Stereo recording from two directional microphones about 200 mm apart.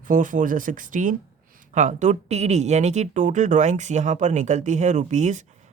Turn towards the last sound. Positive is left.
turn(degrees=-35)  # may be behind; listen again after turning